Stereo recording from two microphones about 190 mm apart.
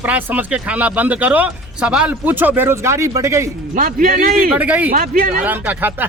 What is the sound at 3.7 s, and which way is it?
Speech, 45° right (ahead or behind).